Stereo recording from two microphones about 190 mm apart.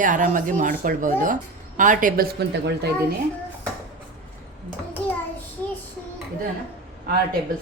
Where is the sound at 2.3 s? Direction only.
60° right (ahead or behind).